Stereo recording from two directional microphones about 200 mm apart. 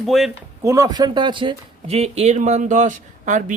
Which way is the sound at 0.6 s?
15° right (ahead or behind).